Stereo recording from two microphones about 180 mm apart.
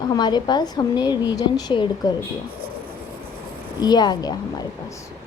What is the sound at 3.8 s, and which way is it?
Speech, 25° left (ahead or behind).